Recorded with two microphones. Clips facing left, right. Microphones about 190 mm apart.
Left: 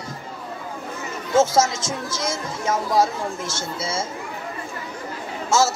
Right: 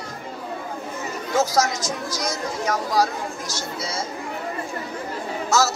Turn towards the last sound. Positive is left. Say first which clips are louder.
# left 1 dB
turn(degrees=25)  # may be behind; listen again after turning